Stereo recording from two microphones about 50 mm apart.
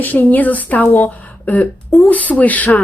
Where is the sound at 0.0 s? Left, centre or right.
Left.